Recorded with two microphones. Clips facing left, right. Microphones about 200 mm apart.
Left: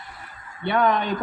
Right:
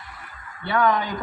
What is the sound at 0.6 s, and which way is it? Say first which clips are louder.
Speech: left 1 dB; 20° left (ahead or behind).